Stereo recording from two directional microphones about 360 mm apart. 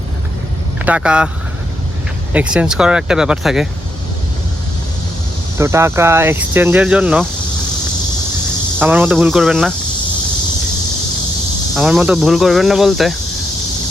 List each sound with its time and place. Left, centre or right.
0.9 s speech: centre
2.3 s speech: centre
5.5 s speech: centre
8.8 s speech: centre
11.7 s speech: centre